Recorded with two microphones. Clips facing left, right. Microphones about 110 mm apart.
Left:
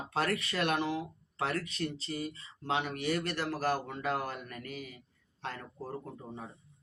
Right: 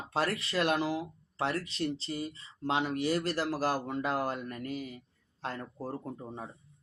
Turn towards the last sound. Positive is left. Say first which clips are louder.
# right 3 dB
turn(degrees=-35)  # may be behind; listen again after turning